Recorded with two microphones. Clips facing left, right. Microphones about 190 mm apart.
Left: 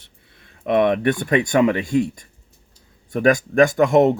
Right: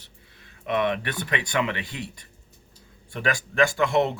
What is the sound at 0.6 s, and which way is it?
Speech, 50° left (ahead or behind).